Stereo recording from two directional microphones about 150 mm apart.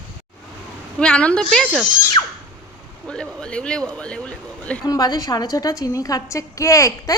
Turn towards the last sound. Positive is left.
turn(degrees=20)  # may be behind; listen again after turning